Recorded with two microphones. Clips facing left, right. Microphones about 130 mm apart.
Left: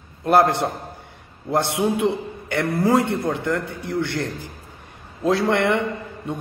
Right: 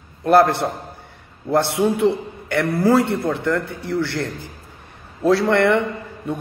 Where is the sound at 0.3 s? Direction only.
20° left (ahead or behind).